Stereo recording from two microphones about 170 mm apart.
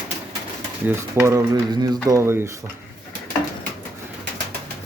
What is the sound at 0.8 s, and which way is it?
Speech, 15° right (ahead or behind).